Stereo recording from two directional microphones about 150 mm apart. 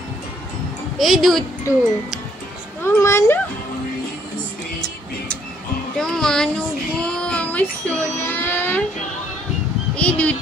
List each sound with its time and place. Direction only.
0.9 s speech: centre (ahead or behind)
2.8 s speech: 20° left (ahead or behind)
5.9 s a child's voice: 5° left (ahead or behind)
7.0 s child singing: 5° left (ahead or behind)
9.9 s speech: 10° left (ahead or behind)